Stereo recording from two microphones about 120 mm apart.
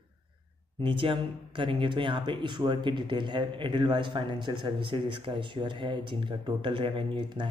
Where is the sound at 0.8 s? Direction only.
45° right (ahead or behind).